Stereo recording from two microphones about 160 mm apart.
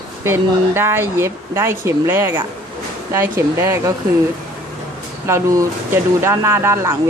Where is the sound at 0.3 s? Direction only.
15° right (ahead or behind).